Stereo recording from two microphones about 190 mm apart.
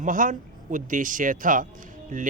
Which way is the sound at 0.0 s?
45° right (ahead or behind).